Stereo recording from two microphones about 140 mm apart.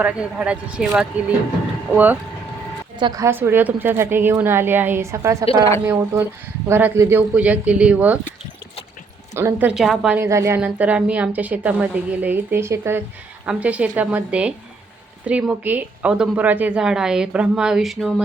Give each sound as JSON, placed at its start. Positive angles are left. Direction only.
{"t": 0.0, "sound": "a woman's voice", "side_deg": -10}
{"t": 3.0, "sound": "a woman's voice", "side_deg": -25}
{"t": 9.3, "sound": "a woman's voice", "side_deg": -15}
{"t": 10.2, "sound": "speech", "side_deg": -20}
{"t": 10.6, "sound": "a woman's voice", "side_deg": -10}